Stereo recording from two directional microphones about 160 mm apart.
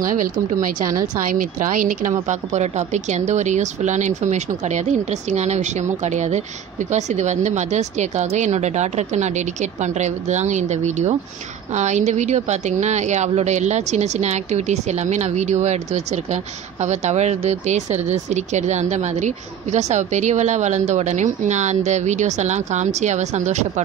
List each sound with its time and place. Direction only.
0.0 s a woman's voice: 55° right (ahead or behind)